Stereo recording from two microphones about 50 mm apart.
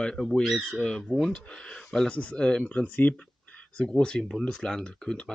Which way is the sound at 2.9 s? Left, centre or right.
Left.